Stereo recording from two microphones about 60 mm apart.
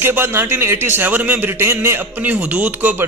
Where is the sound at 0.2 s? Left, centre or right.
Right.